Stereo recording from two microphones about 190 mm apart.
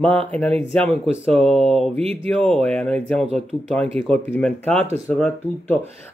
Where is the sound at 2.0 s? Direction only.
35° right (ahead or behind).